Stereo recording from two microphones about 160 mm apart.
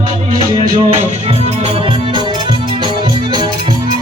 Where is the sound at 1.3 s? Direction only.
40° right (ahead or behind).